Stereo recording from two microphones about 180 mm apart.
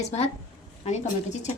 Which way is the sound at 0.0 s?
40° left (ahead or behind).